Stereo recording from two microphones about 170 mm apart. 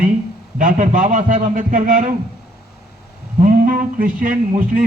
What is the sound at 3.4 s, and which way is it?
A man's voice, 50° right (ahead or behind).